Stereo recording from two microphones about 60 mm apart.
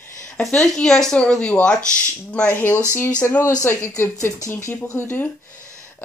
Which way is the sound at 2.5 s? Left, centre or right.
Left.